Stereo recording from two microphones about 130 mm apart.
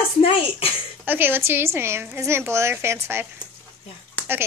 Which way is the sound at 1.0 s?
15° right (ahead or behind).